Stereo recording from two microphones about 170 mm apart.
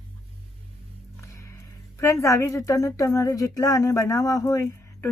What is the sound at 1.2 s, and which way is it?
Speech, 20° left (ahead or behind).